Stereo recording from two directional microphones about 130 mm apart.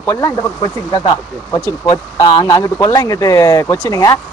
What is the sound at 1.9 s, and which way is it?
A man's voice, 35° left (ahead or behind).